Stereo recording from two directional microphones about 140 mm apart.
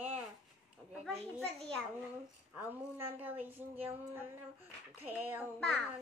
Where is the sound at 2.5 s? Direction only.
15° right (ahead or behind).